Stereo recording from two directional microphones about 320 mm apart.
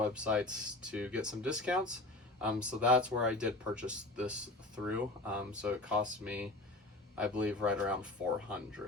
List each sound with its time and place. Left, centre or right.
0.0 s speech: centre